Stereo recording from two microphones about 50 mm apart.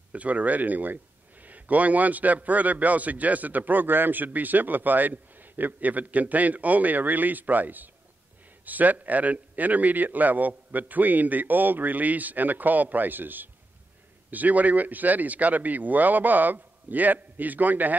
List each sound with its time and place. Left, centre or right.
0.1 s speech: right